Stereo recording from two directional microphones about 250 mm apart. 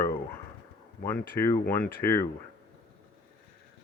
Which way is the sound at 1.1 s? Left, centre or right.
Centre.